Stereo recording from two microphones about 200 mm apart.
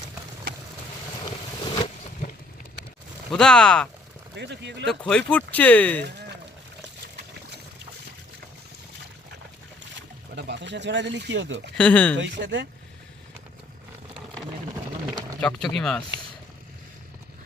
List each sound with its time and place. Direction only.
1.6 s a sound: 25° left (ahead or behind)
3.2 s speech: 5° left (ahead or behind)
4.4 s speech: 60° right (ahead or behind)
4.9 s speech: 5° left (ahead or behind)
10.3 s speech: 60° right (ahead or behind)
11.8 s speech: 5° left (ahead or behind)
12.2 s speech: 65° right (ahead or behind)
15.4 s speech: 5° left (ahead or behind)